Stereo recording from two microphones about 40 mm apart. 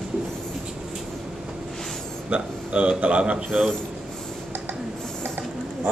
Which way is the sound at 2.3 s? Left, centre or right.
Right.